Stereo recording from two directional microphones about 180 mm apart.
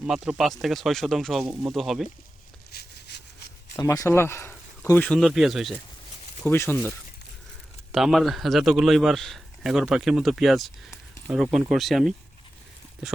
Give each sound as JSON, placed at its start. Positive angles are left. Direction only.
{"t": 0.0, "sound": "a man's voice", "side_deg": -5}
{"t": 2.7, "sound": "a sound", "side_deg": 70}
{"t": 3.8, "sound": "a man's voice", "side_deg": 20}
{"t": 6.4, "sound": "speech", "side_deg": 10}
{"t": 7.9, "sound": "a man's voice", "side_deg": 0}